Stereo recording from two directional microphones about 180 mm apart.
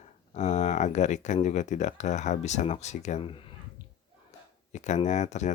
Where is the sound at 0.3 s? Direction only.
40° left (ahead or behind).